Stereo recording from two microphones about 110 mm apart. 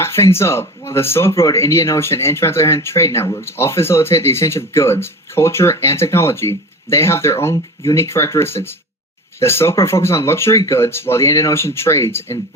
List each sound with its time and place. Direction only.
0.0 s speech: 25° left (ahead or behind)